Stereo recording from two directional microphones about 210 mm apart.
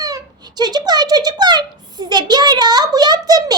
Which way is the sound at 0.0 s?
20° right (ahead or behind).